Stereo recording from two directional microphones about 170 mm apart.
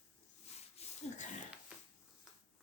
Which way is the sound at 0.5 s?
40° left (ahead or behind).